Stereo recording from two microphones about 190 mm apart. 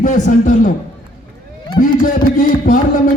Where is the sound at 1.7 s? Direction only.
40° left (ahead or behind).